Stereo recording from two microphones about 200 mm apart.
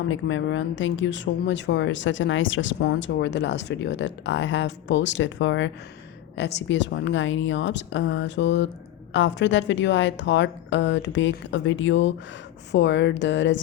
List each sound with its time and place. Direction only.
0.1 s speech: 70° left (ahead or behind)